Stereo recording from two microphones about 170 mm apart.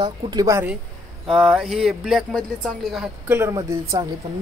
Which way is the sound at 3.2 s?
15° right (ahead or behind).